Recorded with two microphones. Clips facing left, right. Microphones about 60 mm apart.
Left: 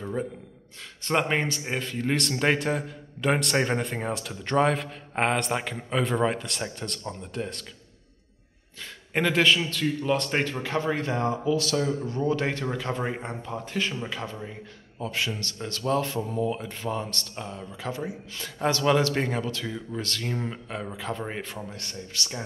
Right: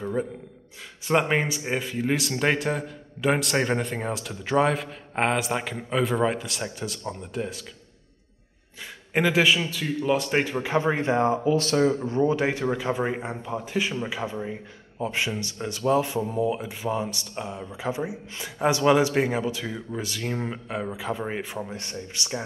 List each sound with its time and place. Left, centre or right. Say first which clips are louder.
0.0 s a man's voice: right 3 dB; centre
9.1 s a man's voice: right 1 dB; centre; by 11.3 s right
11.4 s speech: right 4 dB; right
12.4 s a man's voice: right 4 dB; centre